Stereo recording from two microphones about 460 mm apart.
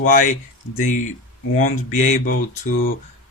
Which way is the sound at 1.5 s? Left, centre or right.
Centre.